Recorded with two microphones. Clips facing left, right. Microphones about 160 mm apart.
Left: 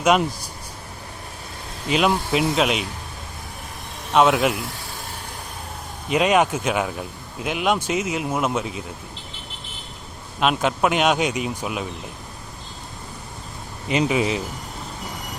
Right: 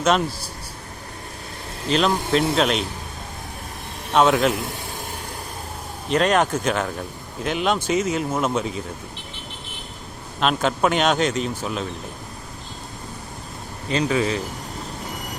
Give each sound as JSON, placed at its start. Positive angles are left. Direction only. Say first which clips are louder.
{"t": 0.0, "sound": "speech", "louder": "left 1 dB", "side_deg": 15}
{"t": 1.9, "sound": "speech", "louder": "even", "side_deg": 10}
{"t": 4.1, "sound": "speech", "louder": "even", "side_deg": 5}
{"t": 6.1, "sound": "speech", "louder": "left 1 dB", "side_deg": 5}
{"t": 10.4, "sound": "speech", "louder": "even", "side_deg": 5}
{"t": 14.1, "sound": "speech", "louder": "even", "side_deg": 15}